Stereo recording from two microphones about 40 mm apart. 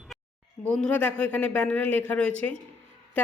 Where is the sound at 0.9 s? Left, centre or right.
Left.